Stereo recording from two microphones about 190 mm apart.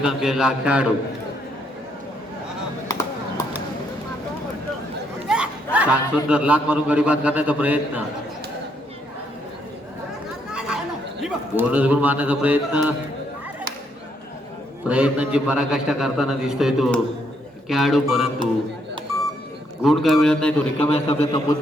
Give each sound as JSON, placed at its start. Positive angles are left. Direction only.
{"t": 0.0, "sound": "a man's voice", "side_deg": -5}
{"t": 2.9, "sound": "a sound", "side_deg": 15}
{"t": 5.3, "sound": "a man's voice", "side_deg": -5}
{"t": 10.5, "sound": "chatter", "side_deg": -5}
{"t": 11.2, "sound": "speech", "side_deg": -5}
{"t": 14.8, "sound": "a man's voice", "side_deg": -5}
{"t": 19.8, "sound": "a man's voice", "side_deg": 0}
{"t": 20.9, "sound": "a man's voice", "side_deg": 35}